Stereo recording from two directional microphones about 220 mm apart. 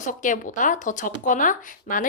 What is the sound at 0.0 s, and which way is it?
A woman's voice, 35° left (ahead or behind).